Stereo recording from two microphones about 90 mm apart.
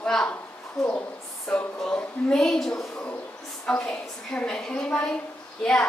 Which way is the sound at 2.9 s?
15° left (ahead or behind).